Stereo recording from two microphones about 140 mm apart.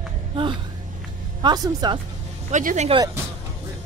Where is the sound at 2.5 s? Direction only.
65° right (ahead or behind).